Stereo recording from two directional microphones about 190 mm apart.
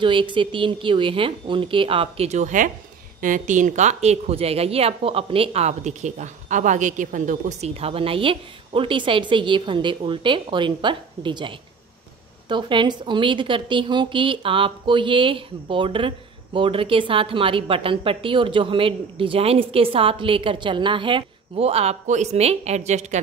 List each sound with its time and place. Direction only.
0.0 s a woman's voice: 25° right (ahead or behind)